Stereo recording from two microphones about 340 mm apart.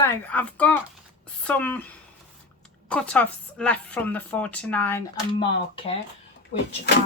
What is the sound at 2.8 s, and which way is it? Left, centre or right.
Speech, centre.